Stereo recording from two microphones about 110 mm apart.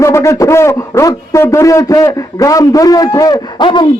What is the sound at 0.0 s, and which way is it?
A man's voice, 25° left (ahead or behind).